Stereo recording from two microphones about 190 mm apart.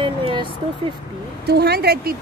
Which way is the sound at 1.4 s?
55° right (ahead or behind).